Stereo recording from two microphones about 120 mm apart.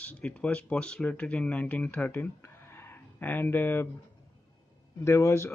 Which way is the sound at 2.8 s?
20° left (ahead or behind).